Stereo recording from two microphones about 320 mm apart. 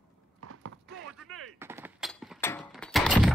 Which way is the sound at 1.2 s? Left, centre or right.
Right.